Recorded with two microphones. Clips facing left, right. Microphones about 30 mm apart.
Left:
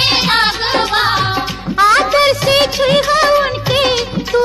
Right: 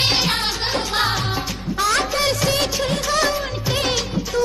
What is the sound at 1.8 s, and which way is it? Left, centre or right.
Music, left.